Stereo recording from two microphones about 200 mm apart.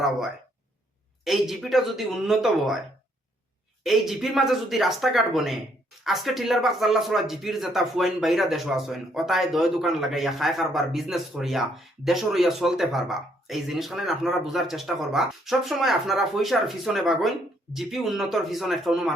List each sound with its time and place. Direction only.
1.2 s speech: centre (ahead or behind)
3.8 s speech: centre (ahead or behind)